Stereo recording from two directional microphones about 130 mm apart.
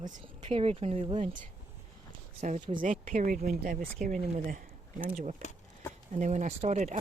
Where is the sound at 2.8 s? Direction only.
85° right.